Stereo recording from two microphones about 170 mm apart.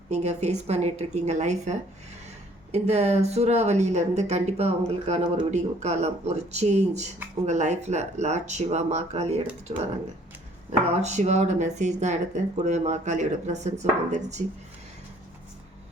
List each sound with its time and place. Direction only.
0.1 s speech: 40° right (ahead or behind)